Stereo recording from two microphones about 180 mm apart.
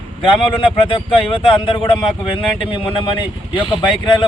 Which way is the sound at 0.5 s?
30° left (ahead or behind).